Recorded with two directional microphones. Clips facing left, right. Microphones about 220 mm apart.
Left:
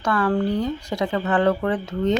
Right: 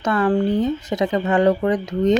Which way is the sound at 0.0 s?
20° right (ahead or behind).